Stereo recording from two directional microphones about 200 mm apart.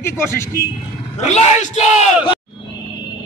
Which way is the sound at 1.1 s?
35° left (ahead or behind).